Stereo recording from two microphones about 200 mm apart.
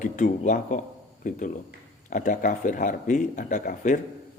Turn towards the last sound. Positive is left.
turn(degrees=40)  # may be behind; listen again after turning